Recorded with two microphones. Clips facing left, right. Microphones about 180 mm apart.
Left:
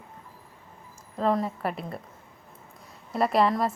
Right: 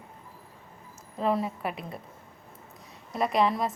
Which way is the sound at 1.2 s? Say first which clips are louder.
Left 2 dB; 5° right (ahead or behind).